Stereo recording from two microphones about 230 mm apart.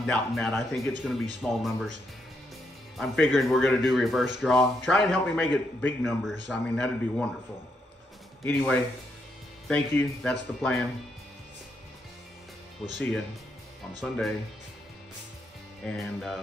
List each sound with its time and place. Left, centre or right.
0.0 s a man's voice: centre
3.0 s a man's voice: centre
8.5 s a man's voice: centre
14.0 s a man's voice: centre
15.8 s a man's voice: centre